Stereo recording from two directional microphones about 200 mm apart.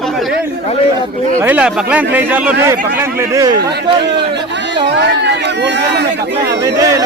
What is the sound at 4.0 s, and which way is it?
Speech, 60° right (ahead or behind).